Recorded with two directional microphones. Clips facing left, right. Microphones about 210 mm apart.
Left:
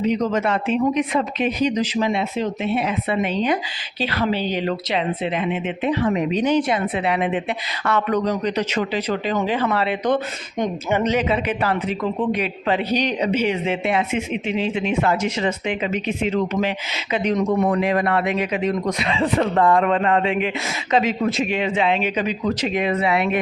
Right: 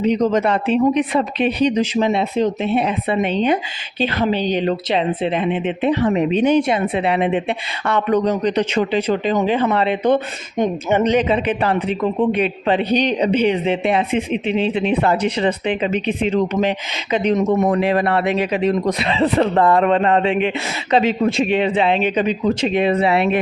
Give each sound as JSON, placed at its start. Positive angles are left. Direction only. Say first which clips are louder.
{"t": 0.2, "sound": "speech", "louder": "right 4 dB", "side_deg": -30}
{"t": 12.9, "sound": "speech", "louder": "right 4 dB", "side_deg": 10}
{"t": 13.4, "sound": "speech", "louder": "right 4 dB", "side_deg": -30}